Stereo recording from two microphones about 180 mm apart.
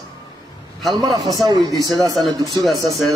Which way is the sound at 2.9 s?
Centre (ahead or behind).